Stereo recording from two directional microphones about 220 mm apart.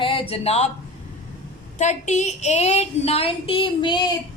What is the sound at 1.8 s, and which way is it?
Child singing, 30° left (ahead or behind).